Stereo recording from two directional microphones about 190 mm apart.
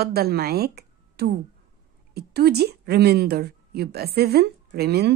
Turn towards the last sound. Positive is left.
turn(degrees=-55)  # may be behind; listen again after turning